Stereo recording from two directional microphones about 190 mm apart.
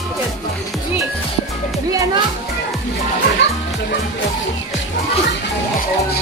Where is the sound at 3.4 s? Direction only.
65° left (ahead or behind).